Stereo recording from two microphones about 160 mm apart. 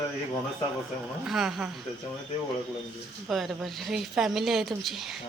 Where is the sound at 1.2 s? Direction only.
5° right (ahead or behind).